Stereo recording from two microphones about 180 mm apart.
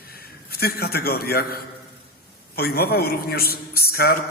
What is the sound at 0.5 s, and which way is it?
A man's voice, 60° left (ahead or behind).